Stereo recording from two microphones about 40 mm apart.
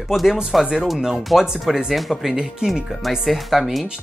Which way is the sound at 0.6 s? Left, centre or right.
Centre.